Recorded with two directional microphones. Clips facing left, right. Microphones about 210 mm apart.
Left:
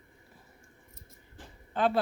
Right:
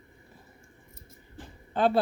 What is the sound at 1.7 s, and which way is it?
Speech, 35° right (ahead or behind).